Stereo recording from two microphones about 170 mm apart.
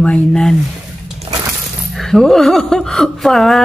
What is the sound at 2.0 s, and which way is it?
Speech, centre (ahead or behind).